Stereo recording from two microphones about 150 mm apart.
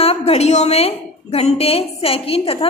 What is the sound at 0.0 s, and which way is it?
A woman's voice, 40° left (ahead or behind).